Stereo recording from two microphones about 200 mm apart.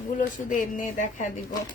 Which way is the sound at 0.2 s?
40° left (ahead or behind).